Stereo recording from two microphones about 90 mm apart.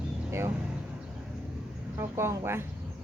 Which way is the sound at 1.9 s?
30° right (ahead or behind).